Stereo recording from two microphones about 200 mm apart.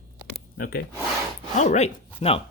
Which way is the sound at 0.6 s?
50° left (ahead or behind).